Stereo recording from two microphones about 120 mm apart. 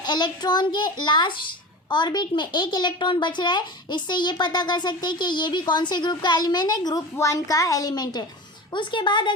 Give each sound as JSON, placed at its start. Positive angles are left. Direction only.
{"t": 0.0, "sound": "a woman's voice", "side_deg": 35}